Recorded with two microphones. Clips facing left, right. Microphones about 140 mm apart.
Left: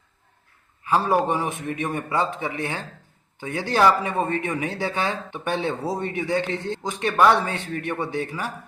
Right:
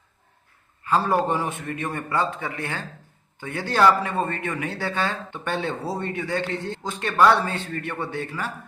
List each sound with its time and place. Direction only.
0.9 s speech: 15° left (ahead or behind)